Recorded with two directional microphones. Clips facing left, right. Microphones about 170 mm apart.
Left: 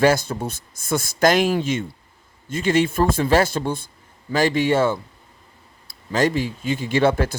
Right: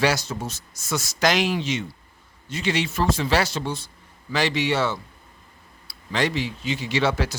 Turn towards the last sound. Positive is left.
turn(degrees=50)  # may be behind; listen again after turning